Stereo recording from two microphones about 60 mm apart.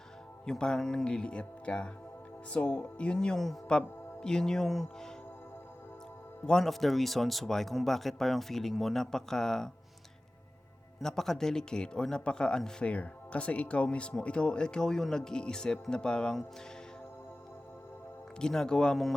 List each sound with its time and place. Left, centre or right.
0.4 s speech: centre
6.4 s speech: centre
11.0 s speech: centre
18.3 s speech: centre